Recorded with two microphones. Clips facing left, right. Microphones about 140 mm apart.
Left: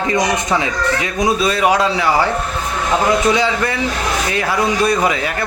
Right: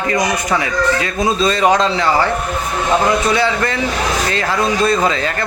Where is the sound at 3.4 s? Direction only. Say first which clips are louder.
Right 1 dB; 15° left (ahead or behind).